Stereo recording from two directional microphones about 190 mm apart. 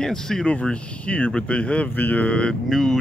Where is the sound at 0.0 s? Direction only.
5° left (ahead or behind).